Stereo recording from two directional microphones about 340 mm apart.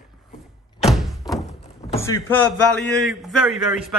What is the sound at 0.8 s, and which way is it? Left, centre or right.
Thump, centre.